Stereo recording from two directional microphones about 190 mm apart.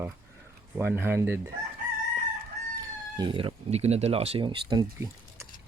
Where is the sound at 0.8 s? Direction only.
10° right (ahead or behind).